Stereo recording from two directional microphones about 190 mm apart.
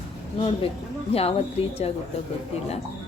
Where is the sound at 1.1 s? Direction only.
30° left (ahead or behind).